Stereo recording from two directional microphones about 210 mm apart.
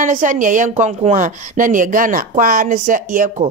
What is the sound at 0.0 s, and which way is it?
A woman's voice, 35° right (ahead or behind).